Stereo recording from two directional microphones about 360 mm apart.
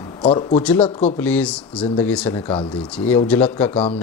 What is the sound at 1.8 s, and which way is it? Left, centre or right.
Speech, centre.